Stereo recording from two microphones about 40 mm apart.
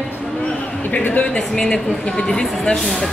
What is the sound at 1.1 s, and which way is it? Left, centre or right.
Speech, left.